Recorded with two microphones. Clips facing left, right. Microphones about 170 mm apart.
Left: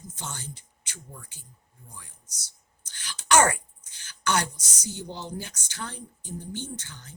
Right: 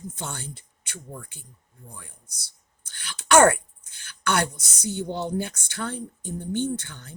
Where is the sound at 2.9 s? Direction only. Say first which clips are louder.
Right 4 dB; 55° right (ahead or behind).